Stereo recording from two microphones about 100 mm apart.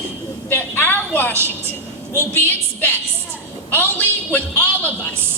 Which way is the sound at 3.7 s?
20° left (ahead or behind).